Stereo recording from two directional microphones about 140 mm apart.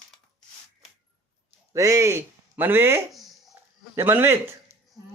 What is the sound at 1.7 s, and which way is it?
Speech, 20° right (ahead or behind).